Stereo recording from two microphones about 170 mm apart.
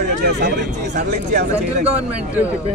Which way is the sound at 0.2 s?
75° right (ahead or behind).